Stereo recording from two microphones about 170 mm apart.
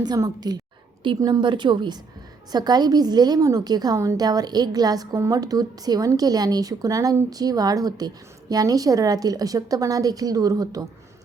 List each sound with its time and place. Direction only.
0.0 s a woman's voice: 25° right (ahead or behind)